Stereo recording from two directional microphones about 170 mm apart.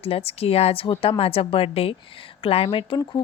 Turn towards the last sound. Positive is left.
turn(degrees=25)  # may be behind; listen again after turning